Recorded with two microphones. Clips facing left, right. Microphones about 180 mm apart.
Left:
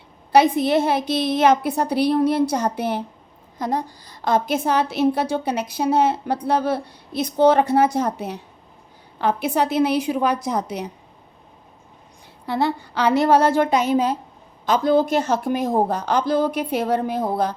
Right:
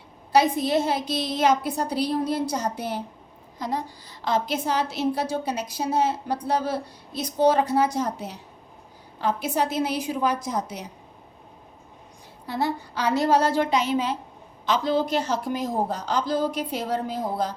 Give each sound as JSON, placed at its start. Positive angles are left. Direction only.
{"t": 0.3, "sound": "a woman's voice", "side_deg": 60}
{"t": 3.6, "sound": "a woman's voice", "side_deg": 50}
{"t": 12.5, "sound": "a woman's voice", "side_deg": 65}